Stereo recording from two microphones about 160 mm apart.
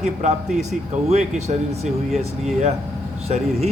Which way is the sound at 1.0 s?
45° right (ahead or behind).